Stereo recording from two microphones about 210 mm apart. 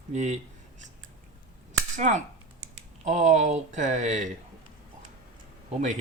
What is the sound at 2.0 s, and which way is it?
Speech, 35° right (ahead or behind).